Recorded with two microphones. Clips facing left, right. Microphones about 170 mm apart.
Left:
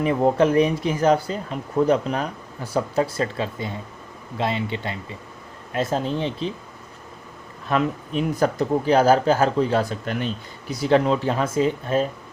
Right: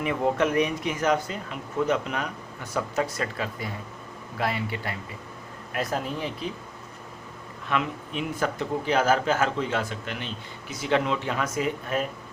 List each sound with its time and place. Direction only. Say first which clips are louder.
0.0 s speech: left 6 dB; 35° left (ahead or behind)
7.7 s speech: left 6 dB; 40° left (ahead or behind)